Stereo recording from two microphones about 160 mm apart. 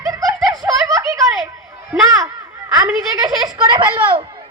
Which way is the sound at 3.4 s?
25° right (ahead or behind).